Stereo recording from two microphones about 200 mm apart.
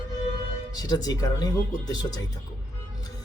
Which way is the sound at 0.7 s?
20° left (ahead or behind).